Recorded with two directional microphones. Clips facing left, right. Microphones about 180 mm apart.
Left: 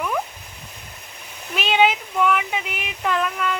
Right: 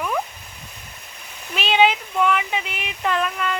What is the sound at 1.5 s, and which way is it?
Speech, 15° left (ahead or behind).